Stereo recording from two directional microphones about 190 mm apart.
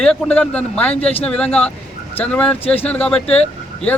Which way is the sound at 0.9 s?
30° left (ahead or behind).